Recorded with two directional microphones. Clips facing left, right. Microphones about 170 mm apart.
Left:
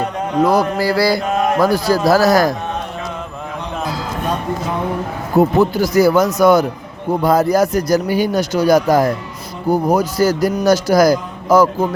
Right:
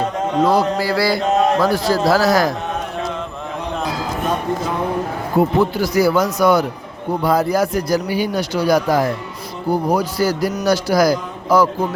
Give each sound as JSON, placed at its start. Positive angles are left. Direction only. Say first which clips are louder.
{"t": 0.5, "sound": "a man's voice", "louder": "left 2 dB", "side_deg": 40}
{"t": 1.2, "sound": "mantra", "louder": "right 1 dB", "side_deg": -25}
{"t": 1.7, "sound": "a man's voice", "louder": "left 2 dB", "side_deg": 40}
{"t": 5.4, "sound": "a man's voice", "louder": "left 3 dB", "side_deg": 40}